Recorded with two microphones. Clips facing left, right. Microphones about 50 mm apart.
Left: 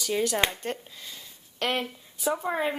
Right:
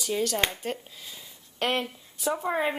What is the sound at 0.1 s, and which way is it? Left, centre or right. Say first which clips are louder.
Speech: left 1 dB; centre.